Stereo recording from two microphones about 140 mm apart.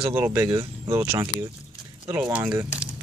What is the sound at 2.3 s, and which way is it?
Speech, 15° right (ahead or behind).